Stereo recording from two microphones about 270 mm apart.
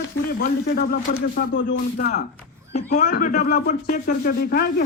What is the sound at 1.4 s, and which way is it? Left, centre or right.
A man's voice, left.